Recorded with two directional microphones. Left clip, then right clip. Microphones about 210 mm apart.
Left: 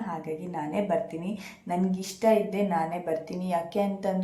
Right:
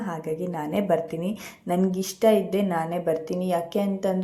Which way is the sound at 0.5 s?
30° right (ahead or behind).